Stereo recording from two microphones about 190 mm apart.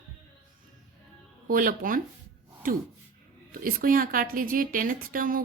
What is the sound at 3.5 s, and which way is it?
A woman's voice, 45° right (ahead or behind).